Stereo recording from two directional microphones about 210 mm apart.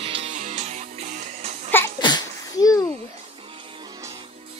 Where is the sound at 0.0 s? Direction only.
25° right (ahead or behind).